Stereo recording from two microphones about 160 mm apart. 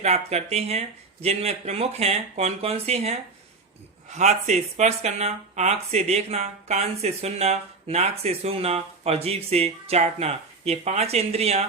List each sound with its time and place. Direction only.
0.0 s speech: 40° right (ahead or behind)